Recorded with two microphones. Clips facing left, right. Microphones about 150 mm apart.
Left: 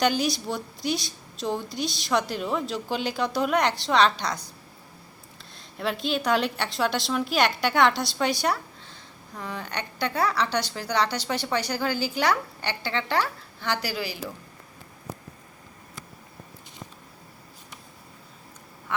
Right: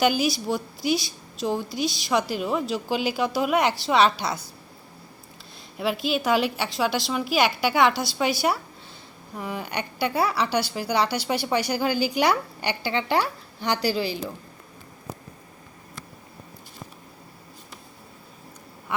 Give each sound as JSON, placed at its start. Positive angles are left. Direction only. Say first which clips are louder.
{"t": 0.0, "sound": "a woman's voice", "louder": "right 2 dB", "side_deg": -5}
{"t": 5.7, "sound": "a woman's voice", "louder": "right 2 dB", "side_deg": -5}
{"t": 13.8, "sound": "a woman's voice", "louder": "right 6 dB", "side_deg": -25}
{"t": 18.9, "sound": "quack", "louder": "right 1 dB", "side_deg": -10}